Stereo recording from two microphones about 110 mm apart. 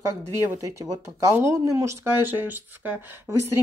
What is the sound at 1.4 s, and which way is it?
Speech, 25° right (ahead or behind).